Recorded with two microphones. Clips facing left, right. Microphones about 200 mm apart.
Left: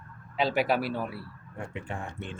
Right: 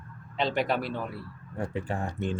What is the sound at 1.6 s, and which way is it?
Speech, 35° right (ahead or behind).